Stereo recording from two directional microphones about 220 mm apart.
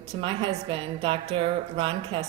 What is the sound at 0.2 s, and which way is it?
Speech, 25° right (ahead or behind).